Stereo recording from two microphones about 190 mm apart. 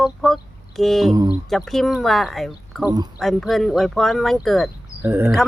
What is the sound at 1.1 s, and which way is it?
Speech, 20° right (ahead or behind).